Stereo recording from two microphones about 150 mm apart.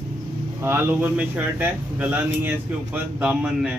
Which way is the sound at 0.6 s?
10° right (ahead or behind).